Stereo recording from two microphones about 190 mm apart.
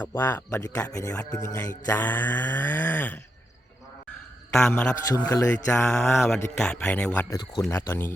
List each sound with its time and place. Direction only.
0.0 s speech: 10° left (ahead or behind)
4.5 s a man's voice: 5° left (ahead or behind)
5.0 s speech: 15° left (ahead or behind)
5.7 s a man's voice: 5° left (ahead or behind)